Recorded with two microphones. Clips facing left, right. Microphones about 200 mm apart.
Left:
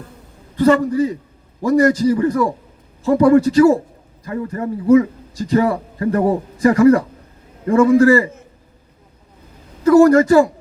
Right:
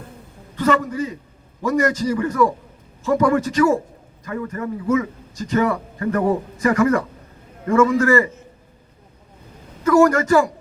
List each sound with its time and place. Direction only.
0.6 s a man's voice: 35° left (ahead or behind)
9.8 s a man's voice: 35° left (ahead or behind)